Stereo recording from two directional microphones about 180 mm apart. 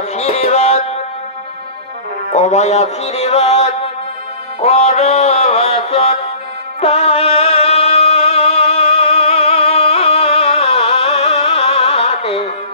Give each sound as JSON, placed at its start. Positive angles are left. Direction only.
{"t": 0.1, "sound": "music", "side_deg": 35}
{"t": 2.3, "sound": "music", "side_deg": 40}